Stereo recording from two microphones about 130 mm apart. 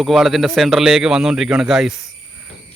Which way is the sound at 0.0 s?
Centre (ahead or behind).